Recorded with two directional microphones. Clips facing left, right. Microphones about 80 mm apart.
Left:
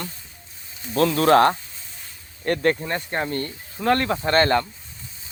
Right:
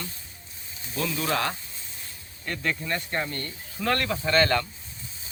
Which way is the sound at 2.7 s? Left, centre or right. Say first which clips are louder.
Left 3 dB; left.